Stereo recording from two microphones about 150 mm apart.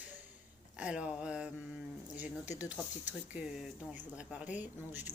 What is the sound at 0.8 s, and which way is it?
Speech, 5° right (ahead or behind).